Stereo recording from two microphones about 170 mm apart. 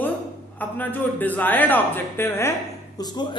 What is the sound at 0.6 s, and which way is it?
A man's voice, 10° left (ahead or behind).